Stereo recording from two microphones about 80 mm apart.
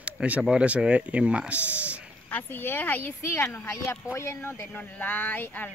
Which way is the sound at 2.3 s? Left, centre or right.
Left.